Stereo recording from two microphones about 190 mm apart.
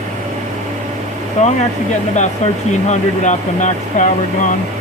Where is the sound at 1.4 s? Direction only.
35° left (ahead or behind).